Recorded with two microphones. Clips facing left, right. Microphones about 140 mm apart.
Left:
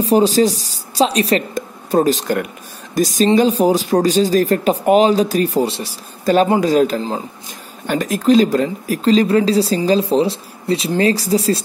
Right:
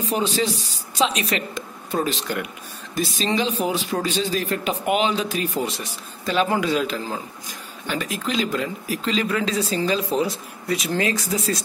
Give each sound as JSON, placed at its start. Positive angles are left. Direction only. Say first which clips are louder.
{"t": 0.0, "sound": "speech", "louder": "left 10 dB", "side_deg": 35}
{"t": 6.2, "sound": "speech", "louder": "left 8 dB", "side_deg": 45}